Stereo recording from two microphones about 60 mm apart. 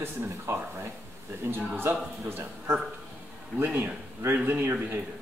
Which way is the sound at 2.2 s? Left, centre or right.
Right.